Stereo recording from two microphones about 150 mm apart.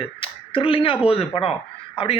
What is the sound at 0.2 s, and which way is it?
Speech, 35° left (ahead or behind).